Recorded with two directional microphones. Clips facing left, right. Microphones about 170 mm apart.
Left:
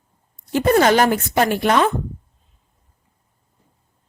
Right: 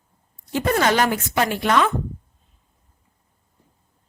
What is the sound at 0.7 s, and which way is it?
A woman's voice, 40° left (ahead or behind).